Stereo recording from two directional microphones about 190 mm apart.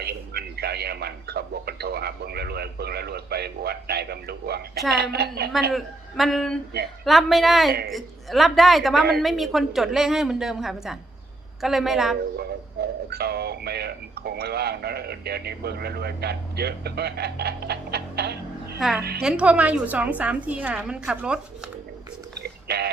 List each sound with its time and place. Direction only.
0.0 s radio: 60° right (ahead or behind)
4.9 s speech: 55° right (ahead or behind)
5.7 s a woman's voice: centre (ahead or behind)
13.1 s speech: 55° right (ahead or behind)
18.8 s a woman's voice: centre (ahead or behind)
22.4 s a sound: 55° right (ahead or behind)